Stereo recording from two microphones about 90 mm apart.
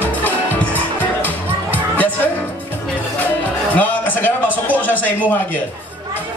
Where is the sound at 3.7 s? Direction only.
20° left (ahead or behind).